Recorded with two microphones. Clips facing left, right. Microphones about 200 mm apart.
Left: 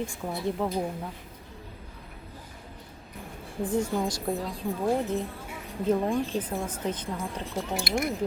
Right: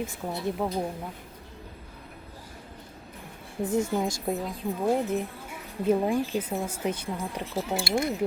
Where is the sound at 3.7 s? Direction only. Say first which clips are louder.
Right 1 dB; 25° right (ahead or behind).